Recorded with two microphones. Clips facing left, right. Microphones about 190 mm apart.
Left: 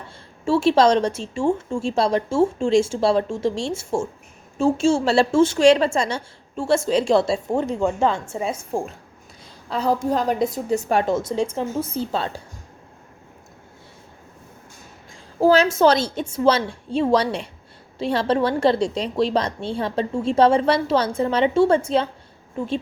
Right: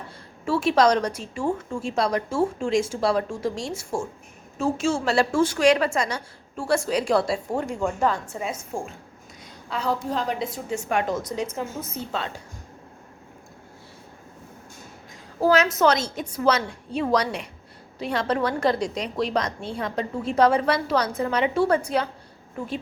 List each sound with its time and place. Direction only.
0.4 s a woman's voice: 25° left (ahead or behind)
15.4 s a woman's voice: 30° left (ahead or behind)